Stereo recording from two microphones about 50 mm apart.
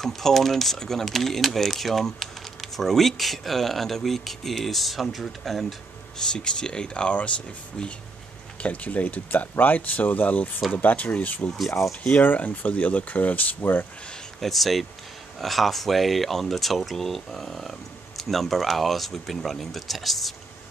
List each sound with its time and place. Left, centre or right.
0.0 s speech: centre
6.1 s speech: centre
11.5 s speech: centre
12.2 s speech: left
14.4 s speech: centre